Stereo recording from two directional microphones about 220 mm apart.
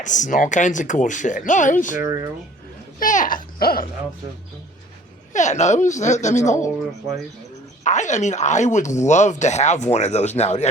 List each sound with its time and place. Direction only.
0.0 s speech: 35° left (ahead or behind)
2.0 s speech: 15° right (ahead or behind)
3.0 s speech: 35° left (ahead or behind)
5.3 s speech: 35° left (ahead or behind)
7.9 s speech: 35° left (ahead or behind)